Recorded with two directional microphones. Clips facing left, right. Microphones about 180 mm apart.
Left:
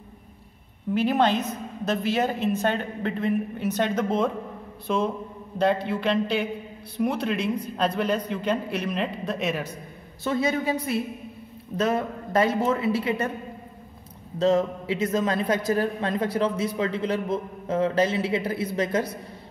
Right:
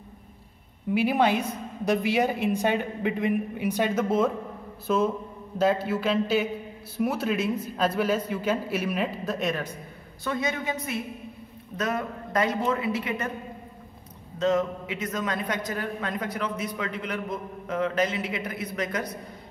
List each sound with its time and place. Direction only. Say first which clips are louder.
0.9 s a woman's voice: left 1 dB; 10° right (ahead or behind); by 9.8 s 5° left (ahead or behind)
10.2 s a man's voice: left 4 dB; 30° left (ahead or behind)
14.4 s a woman's voice: left 3 dB; 30° left (ahead or behind)